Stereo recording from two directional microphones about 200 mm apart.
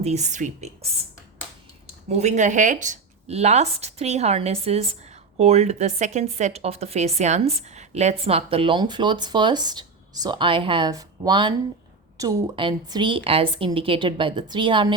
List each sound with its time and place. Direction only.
0.0 s speech: 35° right (ahead or behind)
2.0 s a woman's voice: 35° right (ahead or behind)